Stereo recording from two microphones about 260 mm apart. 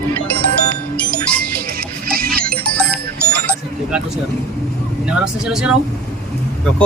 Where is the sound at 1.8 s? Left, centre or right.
Right.